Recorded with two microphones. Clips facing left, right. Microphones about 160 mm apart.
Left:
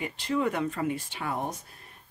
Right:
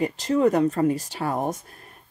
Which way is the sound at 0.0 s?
40° right (ahead or behind).